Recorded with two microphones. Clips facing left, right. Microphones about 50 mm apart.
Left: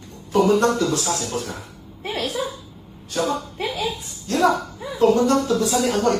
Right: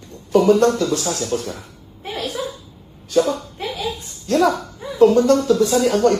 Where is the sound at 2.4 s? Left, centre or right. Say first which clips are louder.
Even; left.